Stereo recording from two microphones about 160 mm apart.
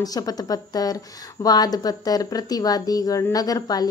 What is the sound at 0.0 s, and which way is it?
A woman's voice, 25° left (ahead or behind).